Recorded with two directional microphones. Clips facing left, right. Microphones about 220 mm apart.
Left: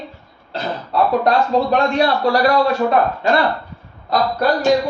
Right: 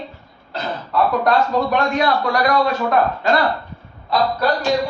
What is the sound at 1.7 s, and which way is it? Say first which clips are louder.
Speech: left 2 dB; 30° left (ahead or behind).